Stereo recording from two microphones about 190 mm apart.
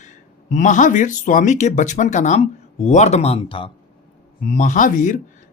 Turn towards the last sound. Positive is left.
turn(degrees=40)  # may be behind; listen again after turning